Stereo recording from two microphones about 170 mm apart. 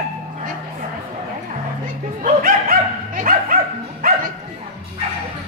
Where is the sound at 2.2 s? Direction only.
55° right (ahead or behind).